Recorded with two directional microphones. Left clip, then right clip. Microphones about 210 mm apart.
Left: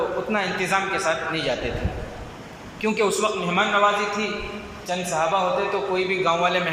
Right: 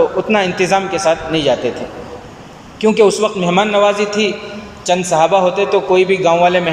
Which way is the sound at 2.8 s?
35° right (ahead or behind).